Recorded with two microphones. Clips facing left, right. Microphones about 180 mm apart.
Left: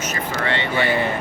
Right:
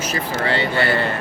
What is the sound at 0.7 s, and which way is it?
Speech, 15° left (ahead or behind).